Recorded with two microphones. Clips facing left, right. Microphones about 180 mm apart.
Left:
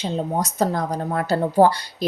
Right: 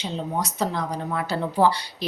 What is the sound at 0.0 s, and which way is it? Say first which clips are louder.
A woman's voice: left 4 dB; 45° left (ahead or behind).